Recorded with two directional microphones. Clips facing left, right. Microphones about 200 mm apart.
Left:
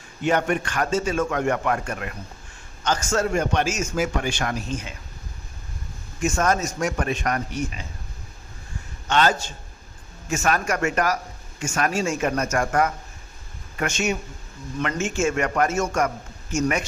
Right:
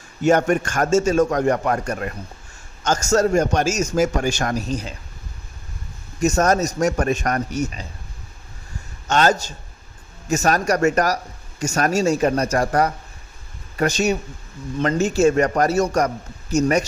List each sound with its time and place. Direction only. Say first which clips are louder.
0.2 s a man's voice: right 5 dB; 45° right (ahead or behind)
6.1 s a man's voice: right 5 dB; 40° right (ahead or behind)
9.0 s a man's voice: right 3 dB; 45° right (ahead or behind)